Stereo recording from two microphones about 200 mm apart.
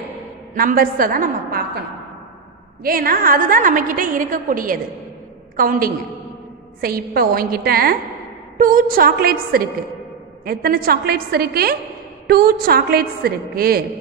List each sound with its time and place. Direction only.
0.6 s a woman's voice: 45° right (ahead or behind)
2.8 s a woman's voice: 45° right (ahead or behind)